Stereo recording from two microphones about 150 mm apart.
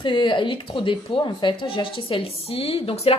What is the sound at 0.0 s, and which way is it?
Speech, 30° left (ahead or behind).